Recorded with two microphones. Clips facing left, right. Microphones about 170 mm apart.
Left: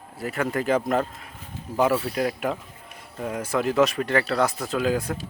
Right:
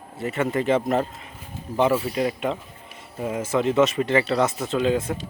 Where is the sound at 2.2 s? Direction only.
Centre (ahead or behind).